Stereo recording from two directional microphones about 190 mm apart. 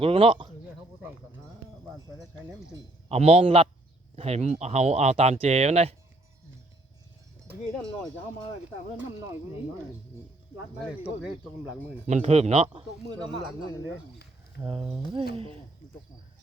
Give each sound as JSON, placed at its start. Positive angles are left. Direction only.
{"t": 0.0, "sound": "speech", "side_deg": -30}
{"t": 3.1, "sound": "speech", "side_deg": -30}
{"t": 10.8, "sound": "speech", "side_deg": -5}
{"t": 12.0, "sound": "speech", "side_deg": -35}
{"t": 14.6, "sound": "speech", "side_deg": -25}